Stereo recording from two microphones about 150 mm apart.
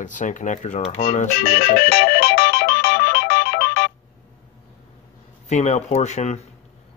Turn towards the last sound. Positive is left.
turn(degrees=50)  # may be behind; listen again after turning